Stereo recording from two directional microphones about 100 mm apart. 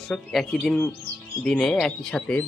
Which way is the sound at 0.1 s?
5° left (ahead or behind).